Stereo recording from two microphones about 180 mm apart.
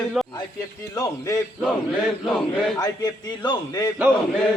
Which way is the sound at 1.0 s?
20° left (ahead or behind).